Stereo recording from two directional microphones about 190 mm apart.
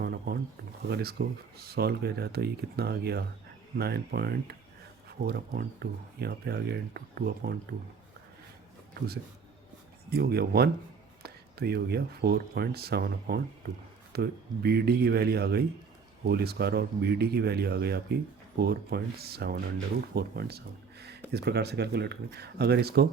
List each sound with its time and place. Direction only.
0.0 s a sound: 55° right (ahead or behind)
0.9 s speech: 55° right (ahead or behind)
10.1 s speech: 55° right (ahead or behind)